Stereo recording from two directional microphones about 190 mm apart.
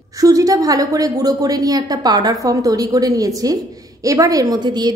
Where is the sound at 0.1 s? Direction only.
20° right (ahead or behind).